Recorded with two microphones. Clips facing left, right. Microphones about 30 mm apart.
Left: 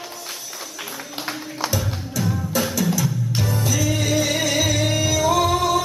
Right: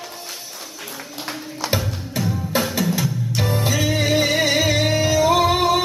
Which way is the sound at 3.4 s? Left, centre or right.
Right.